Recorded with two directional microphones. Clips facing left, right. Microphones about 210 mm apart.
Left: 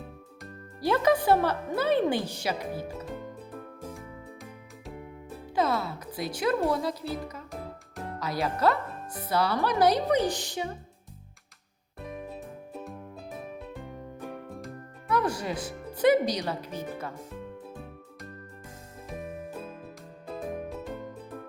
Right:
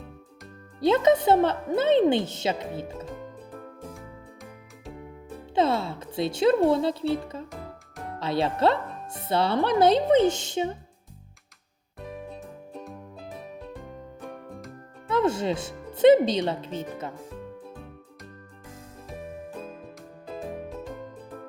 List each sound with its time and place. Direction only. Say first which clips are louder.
0.8 s speech: right 4 dB; 20° right (ahead or behind)
5.5 s speech: right 3 dB; 25° right (ahead or behind)
12.3 s music: even; 5° left (ahead or behind)
14.3 s music: left 1 dB; centre (ahead or behind)
15.0 s speech: right 4 dB; 25° right (ahead or behind)
20.5 s music: even; centre (ahead or behind)